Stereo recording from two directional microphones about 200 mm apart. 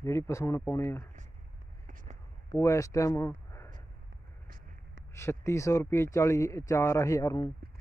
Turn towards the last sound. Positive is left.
turn(degrees=20)  # may be behind; listen again after turning